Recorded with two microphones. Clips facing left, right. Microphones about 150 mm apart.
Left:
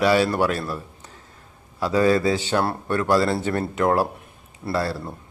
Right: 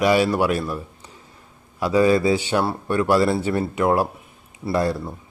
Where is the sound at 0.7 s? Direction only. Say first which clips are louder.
Right 2 dB; 10° right (ahead or behind).